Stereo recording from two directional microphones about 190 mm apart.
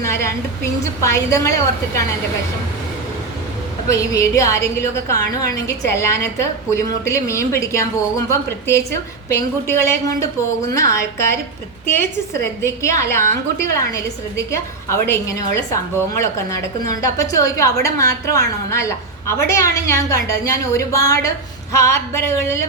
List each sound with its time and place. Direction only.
0.0 s a woman's voice: 15° left (ahead or behind)
3.8 s a woman's voice: 15° left (ahead or behind)